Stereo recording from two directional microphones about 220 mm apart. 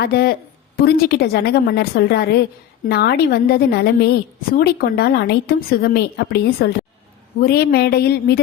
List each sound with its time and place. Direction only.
0.0 s a woman's voice: 45° left (ahead or behind)